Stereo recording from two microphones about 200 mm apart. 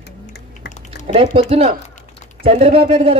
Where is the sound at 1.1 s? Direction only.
30° right (ahead or behind).